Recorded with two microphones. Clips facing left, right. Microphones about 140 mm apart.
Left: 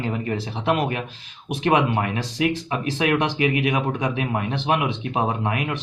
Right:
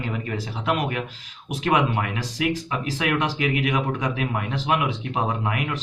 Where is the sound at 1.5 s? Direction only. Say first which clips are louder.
Left 2 dB; 25° left (ahead or behind).